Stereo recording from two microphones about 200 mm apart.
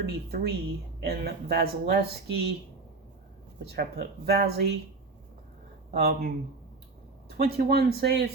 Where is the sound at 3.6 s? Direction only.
55° right (ahead or behind).